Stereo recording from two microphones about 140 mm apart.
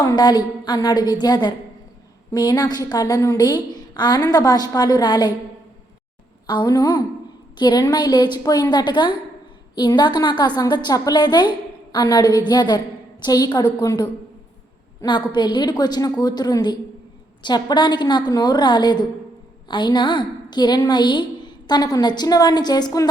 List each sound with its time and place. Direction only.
0.0 s a woman's voice: 25° left (ahead or behind)
6.5 s a woman's voice: 30° left (ahead or behind)